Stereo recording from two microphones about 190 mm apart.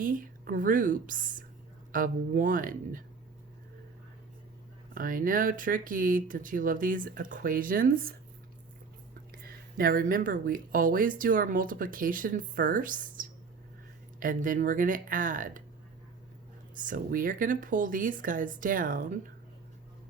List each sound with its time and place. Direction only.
0.0 s speech: 45° right (ahead or behind)
4.9 s speech: 45° right (ahead or behind)
9.7 s speech: 50° right (ahead or behind)
16.8 s speech: 45° right (ahead or behind)